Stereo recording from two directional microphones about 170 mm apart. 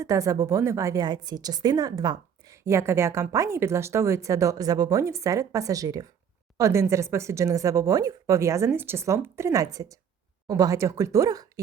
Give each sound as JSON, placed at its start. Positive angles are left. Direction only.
{"t": 0.0, "sound": "a woman's voice", "side_deg": -20}